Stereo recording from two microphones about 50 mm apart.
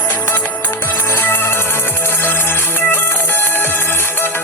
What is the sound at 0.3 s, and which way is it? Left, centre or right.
Music, left.